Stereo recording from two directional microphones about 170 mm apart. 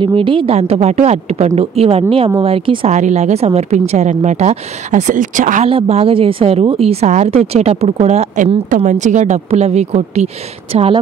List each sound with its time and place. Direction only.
0.0 s speech: 30° right (ahead or behind)
2.9 s speech: 45° right (ahead or behind)
5.7 s speech: 35° right (ahead or behind)
8.6 s speech: 50° right (ahead or behind); by 11.0 s 35° right (ahead or behind)